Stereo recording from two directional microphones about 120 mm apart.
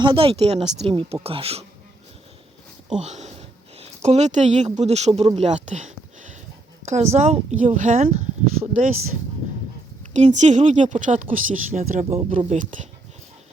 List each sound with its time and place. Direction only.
0.0 s a woman's voice: 45° right (ahead or behind)
3.0 s speech: 70° right (ahead or behind)
5.4 s a sound: 75° right (ahead or behind)
6.8 s speech: 70° right (ahead or behind); by 8.9 s 90° right
10.2 s speech: 75° right (ahead or behind)